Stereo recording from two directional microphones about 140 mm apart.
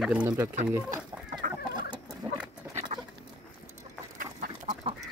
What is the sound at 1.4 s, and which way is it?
Chicken, 90° right.